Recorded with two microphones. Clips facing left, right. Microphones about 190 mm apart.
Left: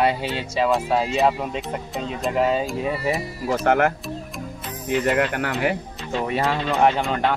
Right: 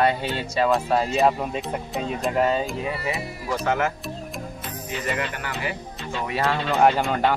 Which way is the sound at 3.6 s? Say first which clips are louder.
Left 5 dB; 60° left (ahead or behind).